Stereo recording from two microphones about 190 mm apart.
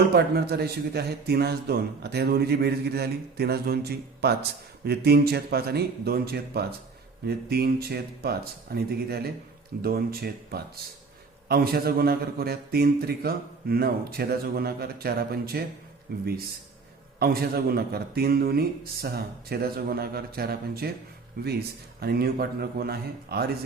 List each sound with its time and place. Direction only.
0.1 s a man's voice: 55° right (ahead or behind)